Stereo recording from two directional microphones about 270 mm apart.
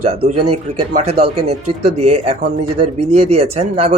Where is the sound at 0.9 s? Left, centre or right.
Right.